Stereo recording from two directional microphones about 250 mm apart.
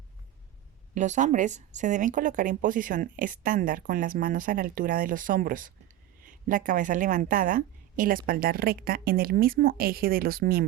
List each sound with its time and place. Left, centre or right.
0.9 s a woman's voice: right